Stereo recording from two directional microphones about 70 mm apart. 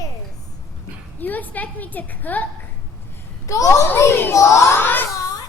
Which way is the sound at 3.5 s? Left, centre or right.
Left.